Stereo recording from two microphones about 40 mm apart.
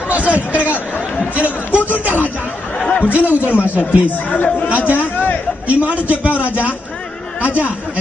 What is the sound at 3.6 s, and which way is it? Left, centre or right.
Speech, left.